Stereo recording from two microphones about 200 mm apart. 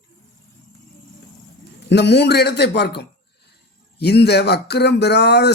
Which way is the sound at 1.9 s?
55° left (ahead or behind).